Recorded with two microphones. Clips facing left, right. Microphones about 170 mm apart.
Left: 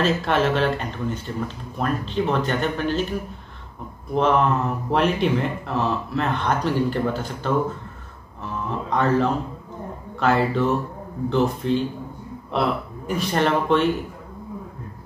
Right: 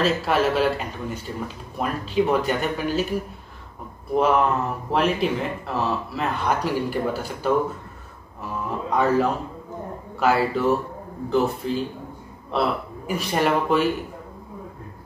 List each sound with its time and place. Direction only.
0.0 s speech: 5° right (ahead or behind)
8.6 s speech: 5° right (ahead or behind)